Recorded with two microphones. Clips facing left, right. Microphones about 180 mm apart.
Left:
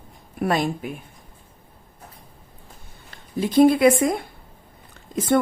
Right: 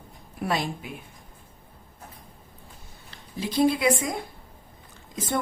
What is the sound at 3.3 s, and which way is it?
A woman's voice, 50° left (ahead or behind).